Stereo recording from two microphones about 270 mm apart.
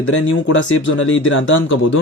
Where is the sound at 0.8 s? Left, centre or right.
Left.